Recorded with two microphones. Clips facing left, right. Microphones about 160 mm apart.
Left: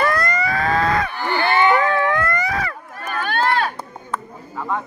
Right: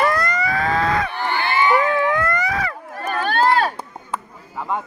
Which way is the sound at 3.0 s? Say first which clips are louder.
Right 3 dB; 35° right (ahead or behind).